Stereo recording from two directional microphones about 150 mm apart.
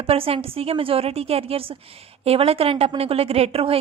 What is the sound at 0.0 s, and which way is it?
A woman's voice, 40° right (ahead or behind).